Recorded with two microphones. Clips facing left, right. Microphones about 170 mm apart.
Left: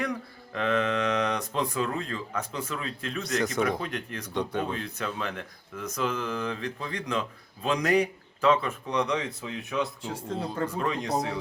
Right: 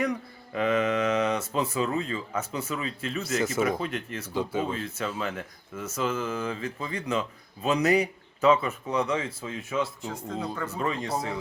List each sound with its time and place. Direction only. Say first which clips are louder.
0.0 s speech: right 3 dB; 10° right (ahead or behind)
10.4 s speech: left 3 dB; 30° left (ahead or behind)
10.8 s speech: even; centre (ahead or behind)